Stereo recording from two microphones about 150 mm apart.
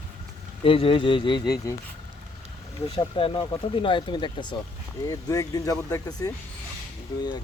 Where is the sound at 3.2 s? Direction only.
35° left (ahead or behind).